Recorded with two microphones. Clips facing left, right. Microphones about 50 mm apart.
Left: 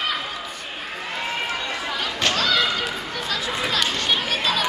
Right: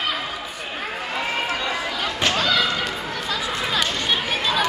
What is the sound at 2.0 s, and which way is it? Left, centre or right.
Basketball bounce, centre.